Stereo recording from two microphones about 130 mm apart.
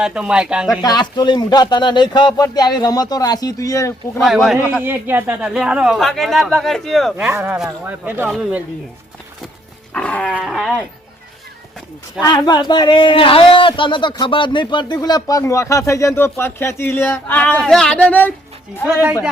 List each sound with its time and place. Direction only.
0.0 s speech: 5° right (ahead or behind)
0.8 s speech: 35° left (ahead or behind)
4.2 s a man's voice: centre (ahead or behind)
4.8 s a man's voice: 15° right (ahead or behind); by 7.3 s centre (ahead or behind)
7.3 s speech: 15° right (ahead or behind)
8.3 s a man's voice: 5° right (ahead or behind)
9.9 s roaring cats: 10° left (ahead or behind)
10.3 s a man's voice: centre (ahead or behind)
12.2 s a man's voice: 30° left (ahead or behind); by 18.3 s 10° left (ahead or behind)